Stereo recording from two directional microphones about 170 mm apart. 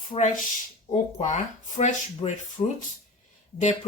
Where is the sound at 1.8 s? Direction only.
40° left (ahead or behind).